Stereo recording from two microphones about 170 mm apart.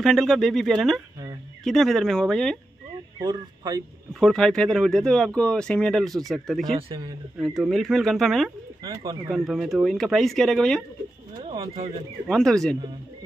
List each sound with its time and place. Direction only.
0.0 s speech: centre (ahead or behind)
3.2 s speech: 20° right (ahead or behind)
4.2 s speech: 5° left (ahead or behind)
6.7 s speech: 30° right (ahead or behind)
7.3 s speech: centre (ahead or behind)
11.4 s speech: 35° right (ahead or behind)
12.3 s speech: 5° left (ahead or behind)